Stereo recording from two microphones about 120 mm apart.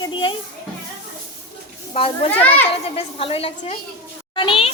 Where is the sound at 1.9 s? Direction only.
50° left (ahead or behind).